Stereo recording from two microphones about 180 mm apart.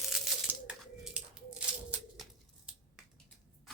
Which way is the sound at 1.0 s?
5° right (ahead or behind).